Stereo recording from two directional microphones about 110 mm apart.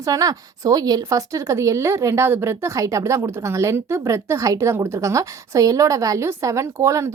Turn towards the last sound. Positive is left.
turn(degrees=-25)  # may be behind; listen again after turning